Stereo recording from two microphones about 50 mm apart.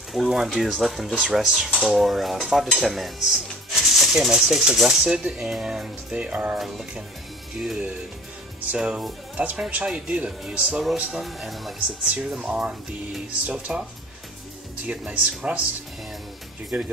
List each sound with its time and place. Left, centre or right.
0.1 s dishes: centre
4.3 s speech: centre
6.1 s speech: right
7.5 s speech: centre; by 10.8 s right
11.0 s speech: centre
11.2 s dishes: centre
12.0 s speech: centre
14.9 s speech: right
16.7 s speech: right